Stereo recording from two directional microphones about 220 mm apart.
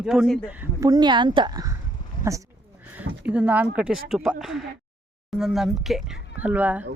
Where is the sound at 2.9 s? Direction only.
5° right (ahead or behind).